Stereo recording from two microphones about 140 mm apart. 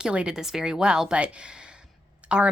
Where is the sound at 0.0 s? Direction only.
5° right (ahead or behind).